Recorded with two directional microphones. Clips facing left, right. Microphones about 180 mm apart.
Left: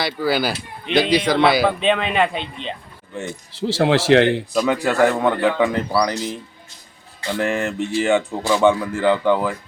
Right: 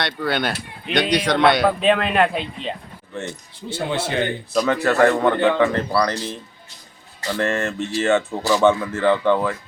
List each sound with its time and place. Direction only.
0.0 s speech: 5° left (ahead or behind)
3.5 s a man's voice: 90° left
4.5 s speech: 10° left (ahead or behind)
5.6 s speech: 15° left (ahead or behind)